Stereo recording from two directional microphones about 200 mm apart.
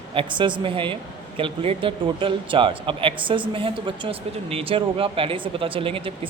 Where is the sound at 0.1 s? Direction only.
25° right (ahead or behind).